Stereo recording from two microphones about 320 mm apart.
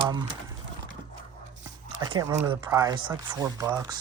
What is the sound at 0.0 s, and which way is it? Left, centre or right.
Speech, centre.